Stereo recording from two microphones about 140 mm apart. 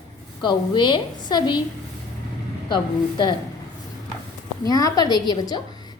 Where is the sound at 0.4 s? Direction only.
35° left (ahead or behind).